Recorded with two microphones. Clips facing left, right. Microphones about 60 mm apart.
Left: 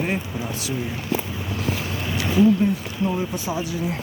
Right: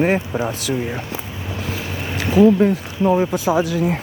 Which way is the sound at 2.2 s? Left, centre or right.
Right.